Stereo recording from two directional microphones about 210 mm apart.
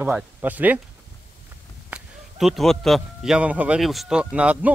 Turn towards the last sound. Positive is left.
turn(degrees=-5)  # may be behind; listen again after turning